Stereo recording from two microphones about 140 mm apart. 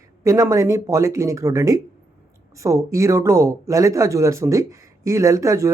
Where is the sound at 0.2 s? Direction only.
20° right (ahead or behind).